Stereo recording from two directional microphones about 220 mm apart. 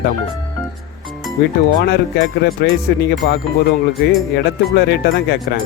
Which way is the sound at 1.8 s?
50° left (ahead or behind).